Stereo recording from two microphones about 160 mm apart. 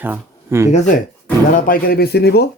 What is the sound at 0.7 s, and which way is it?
Speech, 50° left (ahead or behind).